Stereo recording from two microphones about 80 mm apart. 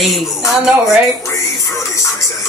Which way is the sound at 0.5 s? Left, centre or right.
Centre.